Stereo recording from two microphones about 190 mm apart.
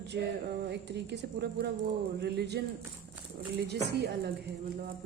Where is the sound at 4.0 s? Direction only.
60° right (ahead or behind).